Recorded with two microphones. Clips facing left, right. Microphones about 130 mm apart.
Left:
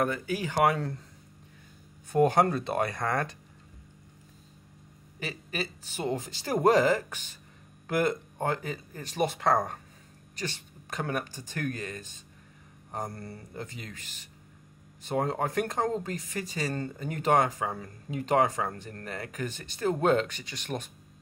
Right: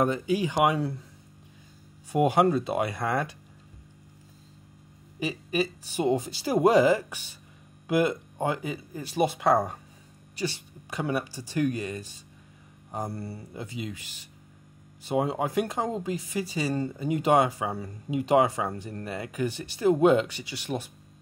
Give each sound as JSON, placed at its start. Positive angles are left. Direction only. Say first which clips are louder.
{"t": 0.0, "sound": "speech", "louder": "right 4 dB", "side_deg": -20}
{"t": 2.1, "sound": "speech", "louder": "right 1 dB", "side_deg": -10}
{"t": 5.2, "sound": "speech", "louder": "right 7 dB", "side_deg": -15}